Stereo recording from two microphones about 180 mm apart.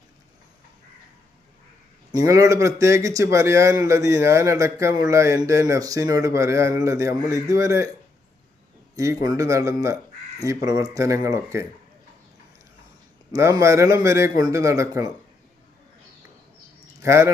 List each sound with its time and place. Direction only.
2.1 s a man's voice: 20° right (ahead or behind)
9.0 s a man's voice: 20° right (ahead or behind)
13.3 s a man's voice: 15° right (ahead or behind)
17.0 s speech: 15° right (ahead or behind)